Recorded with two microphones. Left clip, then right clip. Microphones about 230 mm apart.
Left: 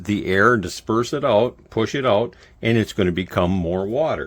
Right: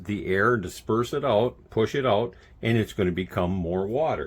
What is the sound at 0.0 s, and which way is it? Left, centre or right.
Speech, left.